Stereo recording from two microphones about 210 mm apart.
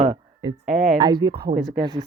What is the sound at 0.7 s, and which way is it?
Speech, centre (ahead or behind).